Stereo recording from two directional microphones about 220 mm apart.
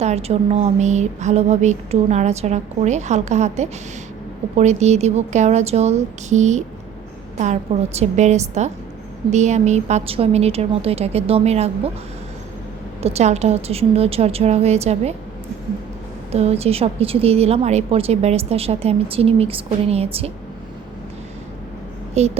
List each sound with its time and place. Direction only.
0.0 s a woman's voice: 30° right (ahead or behind)
13.0 s a woman's voice: 30° right (ahead or behind)
16.3 s a woman's voice: 30° right (ahead or behind)
22.2 s a woman's voice: 30° right (ahead or behind)